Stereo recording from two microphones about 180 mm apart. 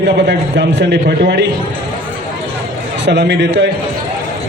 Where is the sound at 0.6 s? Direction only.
65° right (ahead or behind).